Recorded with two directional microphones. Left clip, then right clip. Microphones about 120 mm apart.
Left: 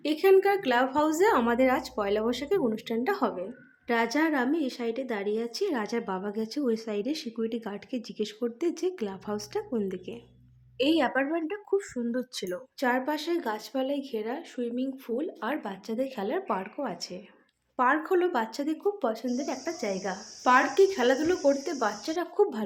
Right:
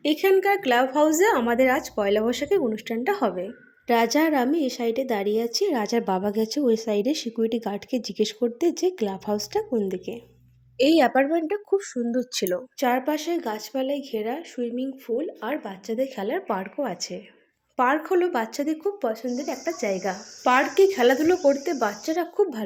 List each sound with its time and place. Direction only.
0.0 s speech: 25° right (ahead or behind)
10.8 s a woman's voice: 35° right (ahead or behind)
11.8 s speech: 25° right (ahead or behind)
19.0 s speech: 5° right (ahead or behind)
19.5 s speech: 20° right (ahead or behind)